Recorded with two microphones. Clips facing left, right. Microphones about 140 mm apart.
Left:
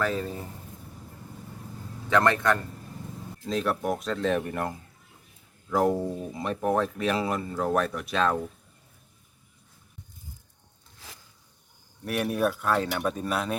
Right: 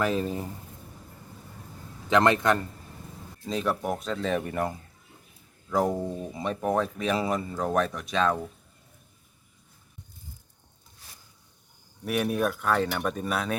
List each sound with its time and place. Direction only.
0.0 s a man's voice: 15° right (ahead or behind)
2.0 s a man's voice: 20° right (ahead or behind)
3.4 s speech: centre (ahead or behind)
5.7 s speech: centre (ahead or behind)
12.0 s speech: centre (ahead or behind)